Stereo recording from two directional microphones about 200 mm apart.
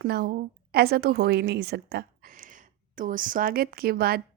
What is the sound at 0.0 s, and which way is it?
A woman's voice, 50° right (ahead or behind).